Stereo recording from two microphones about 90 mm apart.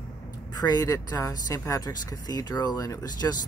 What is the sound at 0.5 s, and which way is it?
Speech, 45° left (ahead or behind).